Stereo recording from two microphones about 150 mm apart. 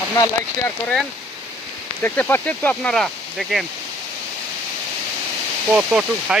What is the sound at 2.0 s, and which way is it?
Speech, 15° left (ahead or behind).